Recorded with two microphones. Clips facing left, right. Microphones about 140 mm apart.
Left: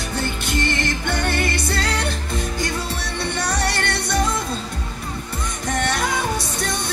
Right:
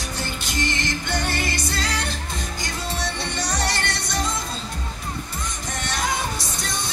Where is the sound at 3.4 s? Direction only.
60° left (ahead or behind).